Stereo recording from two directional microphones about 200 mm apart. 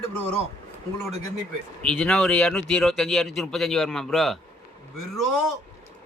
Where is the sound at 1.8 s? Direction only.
5° left (ahead or behind).